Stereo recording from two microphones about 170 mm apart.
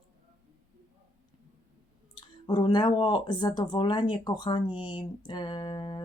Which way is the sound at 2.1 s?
25° left (ahead or behind).